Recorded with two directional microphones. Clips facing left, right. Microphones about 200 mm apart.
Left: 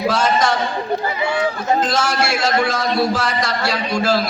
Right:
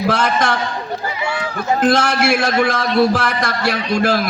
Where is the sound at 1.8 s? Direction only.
60° right (ahead or behind).